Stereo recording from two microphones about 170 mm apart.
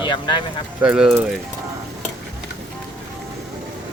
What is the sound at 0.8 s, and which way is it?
Speech, 5° right (ahead or behind).